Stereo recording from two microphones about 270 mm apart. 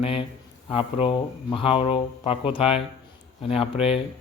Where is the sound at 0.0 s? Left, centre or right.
Left.